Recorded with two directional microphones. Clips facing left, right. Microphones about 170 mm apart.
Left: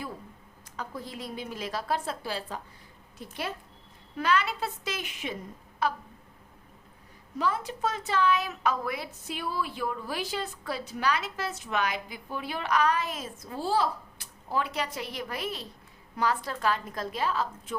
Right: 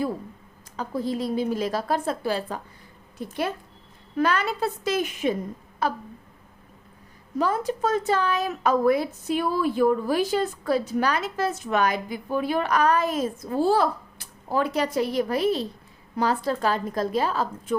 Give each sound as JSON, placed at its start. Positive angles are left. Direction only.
{"t": 0.8, "sound": "a woman's voice", "side_deg": -35}
{"t": 7.3, "sound": "a woman's voice", "side_deg": -45}